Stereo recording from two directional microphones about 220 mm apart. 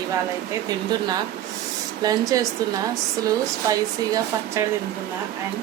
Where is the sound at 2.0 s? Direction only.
15° right (ahead or behind).